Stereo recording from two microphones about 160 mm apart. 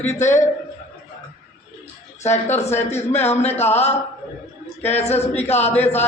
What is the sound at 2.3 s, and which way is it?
A man's voice, 45° left (ahead or behind).